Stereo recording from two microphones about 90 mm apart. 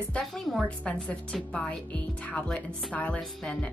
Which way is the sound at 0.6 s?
15° left (ahead or behind).